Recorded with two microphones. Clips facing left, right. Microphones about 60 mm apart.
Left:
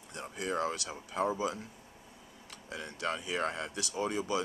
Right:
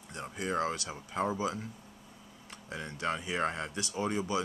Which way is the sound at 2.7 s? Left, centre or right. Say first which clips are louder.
Right 1 dB; right.